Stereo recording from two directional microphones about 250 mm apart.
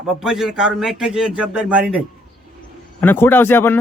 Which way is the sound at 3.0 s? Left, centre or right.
Centre.